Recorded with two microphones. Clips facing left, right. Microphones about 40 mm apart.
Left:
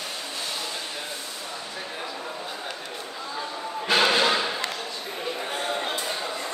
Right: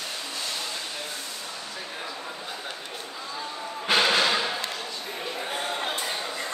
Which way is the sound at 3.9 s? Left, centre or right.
Centre.